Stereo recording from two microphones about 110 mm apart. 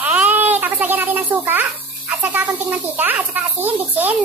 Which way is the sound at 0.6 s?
15° right (ahead or behind).